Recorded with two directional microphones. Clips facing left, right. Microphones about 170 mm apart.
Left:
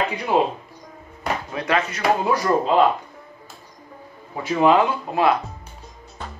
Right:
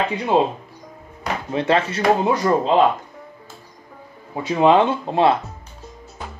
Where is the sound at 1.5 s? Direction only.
25° right (ahead or behind).